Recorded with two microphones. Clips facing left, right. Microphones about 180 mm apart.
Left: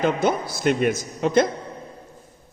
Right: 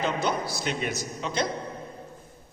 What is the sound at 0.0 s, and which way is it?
A man's voice, 50° left (ahead or behind).